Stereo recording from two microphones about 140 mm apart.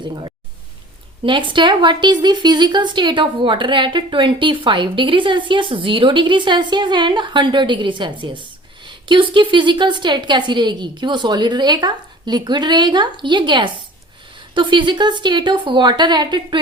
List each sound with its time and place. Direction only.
0.0 s a woman's voice: 30° right (ahead or behind)